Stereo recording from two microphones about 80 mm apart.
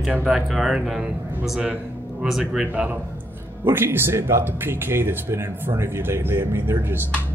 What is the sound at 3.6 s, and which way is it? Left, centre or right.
Speech, right.